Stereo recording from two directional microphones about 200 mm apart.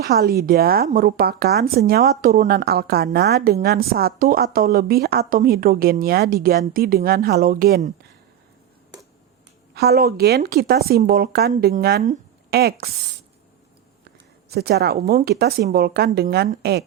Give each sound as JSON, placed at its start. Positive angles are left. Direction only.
{"t": 0.0, "sound": "a woman's voice", "side_deg": -50}
{"t": 9.7, "sound": "a woman's voice", "side_deg": -50}
{"t": 14.5, "sound": "a woman's voice", "side_deg": -50}